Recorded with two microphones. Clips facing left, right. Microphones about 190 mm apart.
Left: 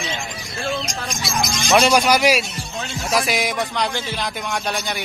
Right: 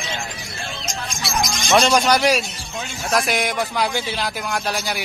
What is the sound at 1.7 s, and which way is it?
A man's voice, 10° left (ahead or behind).